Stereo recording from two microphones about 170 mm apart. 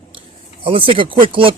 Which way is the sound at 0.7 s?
30° right (ahead or behind).